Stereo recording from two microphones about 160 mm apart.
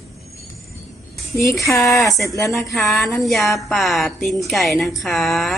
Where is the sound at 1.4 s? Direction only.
20° left (ahead or behind).